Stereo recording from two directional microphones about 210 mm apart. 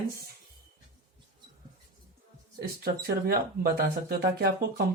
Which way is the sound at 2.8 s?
45° right (ahead or behind).